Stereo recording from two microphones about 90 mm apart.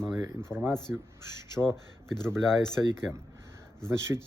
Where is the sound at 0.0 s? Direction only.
30° right (ahead or behind).